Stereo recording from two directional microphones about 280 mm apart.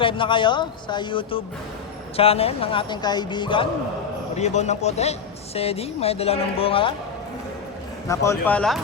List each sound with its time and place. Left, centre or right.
0.0 s speech: centre
8.0 s speech: centre